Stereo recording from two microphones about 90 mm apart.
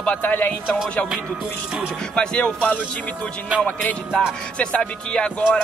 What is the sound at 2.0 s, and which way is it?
Speech, 10° left (ahead or behind).